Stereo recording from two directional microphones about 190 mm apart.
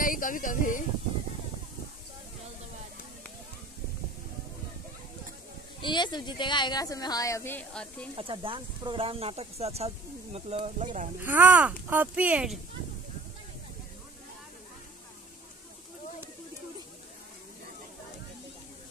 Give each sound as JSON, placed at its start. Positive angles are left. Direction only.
{"t": 0.0, "sound": "a sound", "side_deg": 45}
{"t": 5.8, "sound": "speech", "side_deg": 25}
{"t": 8.2, "sound": "speech", "side_deg": -30}
{"t": 11.2, "sound": "speech", "side_deg": -10}